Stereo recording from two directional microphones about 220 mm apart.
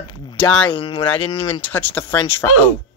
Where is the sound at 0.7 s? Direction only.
25° left (ahead or behind).